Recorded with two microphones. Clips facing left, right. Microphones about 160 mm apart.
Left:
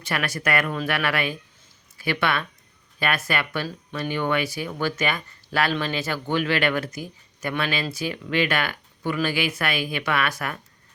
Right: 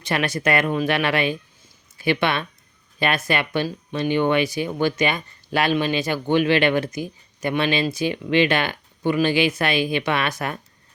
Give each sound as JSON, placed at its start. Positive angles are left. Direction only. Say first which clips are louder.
{"t": 0.0, "sound": "speech", "louder": "right 4 dB", "side_deg": -20}